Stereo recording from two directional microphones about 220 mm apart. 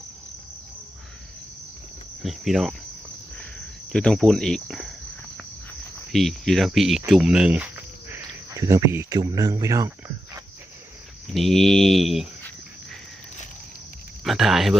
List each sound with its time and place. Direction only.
2.2 s speech: centre (ahead or behind)
3.9 s speech: centre (ahead or behind)
6.1 s speech: centre (ahead or behind); by 9.9 s 15° right (ahead or behind)
11.3 s speech: centre (ahead or behind)
14.3 s speech: centre (ahead or behind)